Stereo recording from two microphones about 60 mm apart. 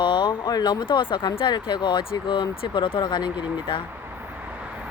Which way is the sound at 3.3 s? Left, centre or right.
Right.